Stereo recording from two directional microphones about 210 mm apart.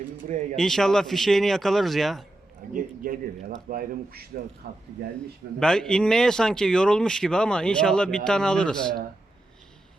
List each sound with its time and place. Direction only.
0.5 s speech: centre (ahead or behind)
2.7 s a man's voice: 40° right (ahead or behind)
5.5 s speech: 5° left (ahead or behind)